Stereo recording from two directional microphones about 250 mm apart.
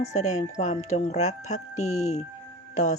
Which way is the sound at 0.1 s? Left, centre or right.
Left.